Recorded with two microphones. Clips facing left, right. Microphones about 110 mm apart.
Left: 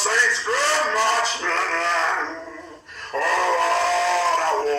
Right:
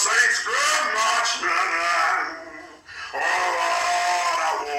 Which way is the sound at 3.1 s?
45° left (ahead or behind).